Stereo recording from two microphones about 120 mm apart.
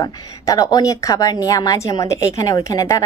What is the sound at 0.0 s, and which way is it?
Speech, 30° left (ahead or behind).